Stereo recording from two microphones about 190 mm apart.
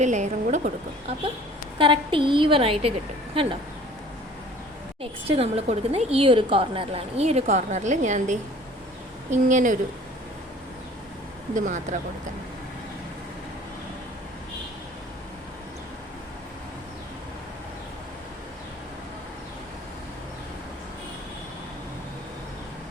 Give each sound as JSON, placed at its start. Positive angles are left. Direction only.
{"t": 0.0, "sound": "a sound", "side_deg": -40}
{"t": 1.8, "sound": "a woman's voice", "side_deg": -25}
{"t": 5.3, "sound": "a woman's voice", "side_deg": -30}
{"t": 11.5, "sound": "a woman's voice", "side_deg": -40}